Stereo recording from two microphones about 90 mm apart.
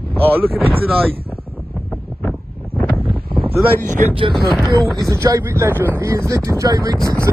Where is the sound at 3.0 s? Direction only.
75° right (ahead or behind).